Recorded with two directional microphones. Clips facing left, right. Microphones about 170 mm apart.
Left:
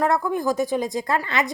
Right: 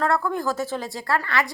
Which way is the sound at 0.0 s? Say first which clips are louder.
Left 2 dB; 15° left (ahead or behind).